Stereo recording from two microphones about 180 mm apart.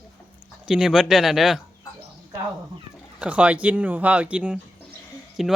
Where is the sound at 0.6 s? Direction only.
5° right (ahead or behind).